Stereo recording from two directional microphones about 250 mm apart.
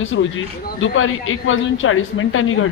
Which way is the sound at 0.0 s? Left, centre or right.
Left.